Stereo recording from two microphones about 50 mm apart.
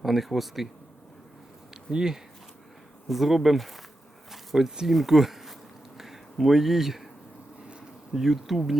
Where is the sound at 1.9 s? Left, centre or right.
Centre.